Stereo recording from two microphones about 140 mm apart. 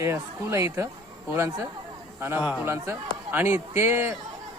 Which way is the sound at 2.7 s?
20° right (ahead or behind).